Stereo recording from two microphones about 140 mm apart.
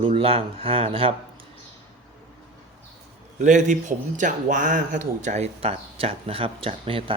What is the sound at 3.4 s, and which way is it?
A man's voice, 60° right (ahead or behind).